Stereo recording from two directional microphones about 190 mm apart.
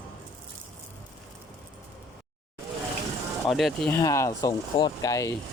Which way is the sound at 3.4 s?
Centre (ahead or behind).